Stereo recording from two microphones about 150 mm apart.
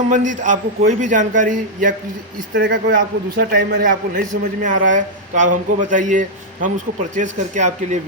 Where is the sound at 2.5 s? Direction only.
85° right; by 8.0 s 50° right (ahead or behind).